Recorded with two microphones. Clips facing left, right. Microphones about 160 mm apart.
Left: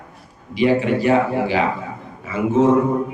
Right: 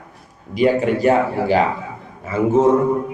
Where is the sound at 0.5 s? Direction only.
45° right (ahead or behind).